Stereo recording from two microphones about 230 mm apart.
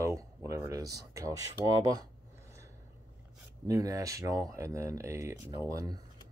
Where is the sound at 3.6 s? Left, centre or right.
Centre.